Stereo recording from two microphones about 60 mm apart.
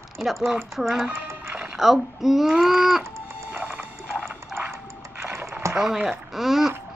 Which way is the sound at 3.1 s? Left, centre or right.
Right.